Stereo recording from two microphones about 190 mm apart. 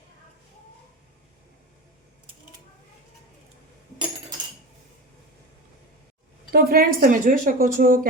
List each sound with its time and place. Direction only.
6.5 s a woman's voice: 50° right (ahead or behind)